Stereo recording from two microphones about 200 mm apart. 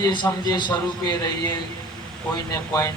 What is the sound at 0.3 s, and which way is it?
Speech, 20° left (ahead or behind).